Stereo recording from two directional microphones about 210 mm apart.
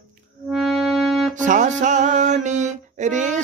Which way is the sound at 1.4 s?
35° right (ahead or behind).